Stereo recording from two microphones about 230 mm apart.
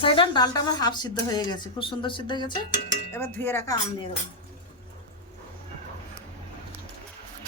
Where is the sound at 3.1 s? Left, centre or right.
Centre.